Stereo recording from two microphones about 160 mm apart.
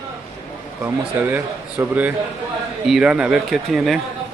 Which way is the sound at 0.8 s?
10° right (ahead or behind).